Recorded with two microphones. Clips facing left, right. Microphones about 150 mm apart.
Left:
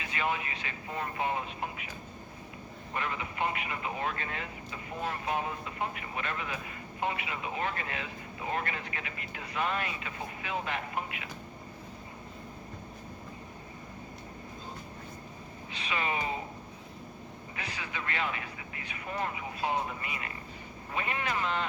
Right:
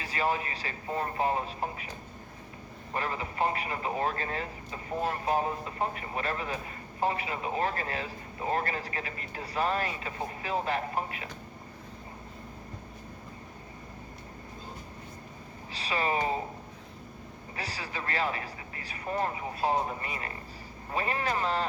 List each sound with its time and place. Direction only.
0.0 s speech: 35° right (ahead or behind)
2.9 s speech: 35° right (ahead or behind)
15.7 s speech: 35° right (ahead or behind)
17.6 s speech: 35° right (ahead or behind)